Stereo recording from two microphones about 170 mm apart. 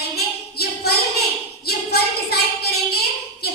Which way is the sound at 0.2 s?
70° left (ahead or behind).